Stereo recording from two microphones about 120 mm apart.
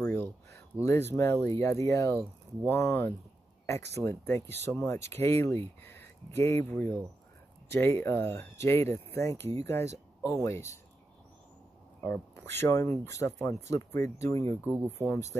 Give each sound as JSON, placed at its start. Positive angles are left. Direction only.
{"t": 0.0, "sound": "a sound", "side_deg": 15}
{"t": 1.1, "sound": "speech", "side_deg": 20}
{"t": 12.0, "sound": "speech", "side_deg": 20}